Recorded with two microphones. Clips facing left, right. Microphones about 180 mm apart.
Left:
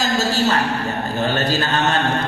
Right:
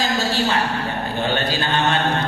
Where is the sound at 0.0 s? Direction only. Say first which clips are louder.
Left 2 dB; 40° left (ahead or behind).